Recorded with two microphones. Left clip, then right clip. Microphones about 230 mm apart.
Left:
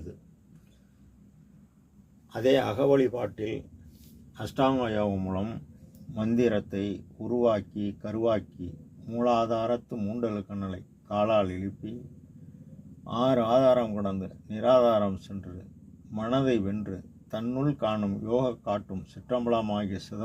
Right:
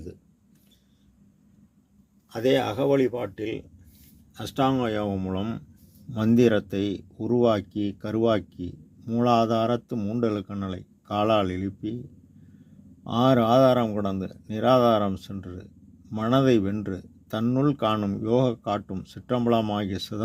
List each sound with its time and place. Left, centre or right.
2.3 s speech: right
13.1 s speech: right